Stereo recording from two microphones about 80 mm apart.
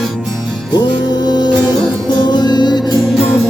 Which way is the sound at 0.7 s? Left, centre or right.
Left.